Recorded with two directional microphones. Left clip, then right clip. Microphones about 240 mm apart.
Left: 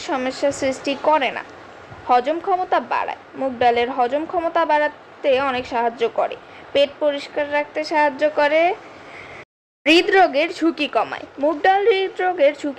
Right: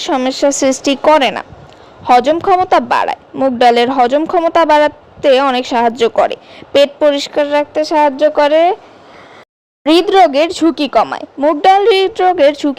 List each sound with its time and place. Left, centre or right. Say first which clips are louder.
0.0 s a woman's voice: right 8 dB; right
9.8 s a woman's voice: right 6 dB; right